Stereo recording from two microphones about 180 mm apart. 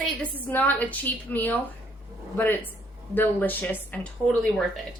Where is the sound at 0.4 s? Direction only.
10° left (ahead or behind).